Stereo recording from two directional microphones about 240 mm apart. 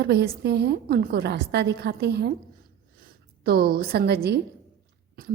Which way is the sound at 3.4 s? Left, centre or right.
Right.